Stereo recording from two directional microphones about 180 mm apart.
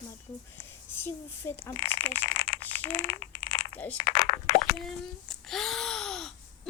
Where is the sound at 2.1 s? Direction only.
90° left.